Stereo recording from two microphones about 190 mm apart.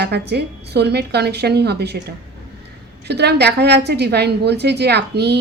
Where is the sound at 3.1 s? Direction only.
60° right (ahead or behind).